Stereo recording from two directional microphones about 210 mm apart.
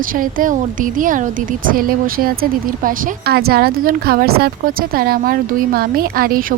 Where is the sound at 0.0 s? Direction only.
40° right (ahead or behind).